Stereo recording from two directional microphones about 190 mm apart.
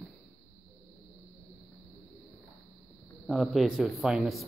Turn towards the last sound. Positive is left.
turn(degrees=0)  # may be behind; listen again after turning